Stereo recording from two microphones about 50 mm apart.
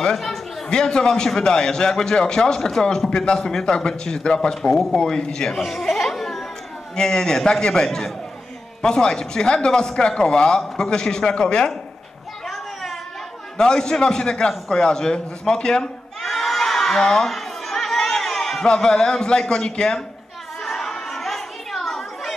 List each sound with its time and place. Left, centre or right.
0.0 s a man's voice: centre
0.7 s speech: centre
5.6 s a sound: centre
7.0 s speech: centre
13.6 s speech: centre
16.2 s children shouting: centre
17.3 s crowd: centre
18.7 s speech: centre
20.6 s chatter: centre